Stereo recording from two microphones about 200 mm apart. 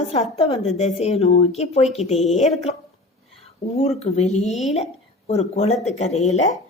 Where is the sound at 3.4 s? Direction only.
30° left (ahead or behind).